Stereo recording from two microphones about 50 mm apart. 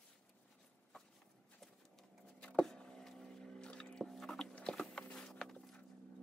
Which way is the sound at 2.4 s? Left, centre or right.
Centre.